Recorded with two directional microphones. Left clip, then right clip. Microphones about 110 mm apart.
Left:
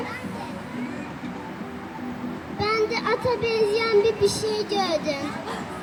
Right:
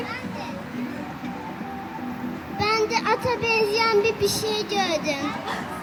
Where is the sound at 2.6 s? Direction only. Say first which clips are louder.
Right 1 dB; 15° left (ahead or behind).